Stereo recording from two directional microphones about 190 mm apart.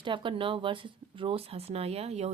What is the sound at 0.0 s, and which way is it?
A woman's voice, 25° right (ahead or behind).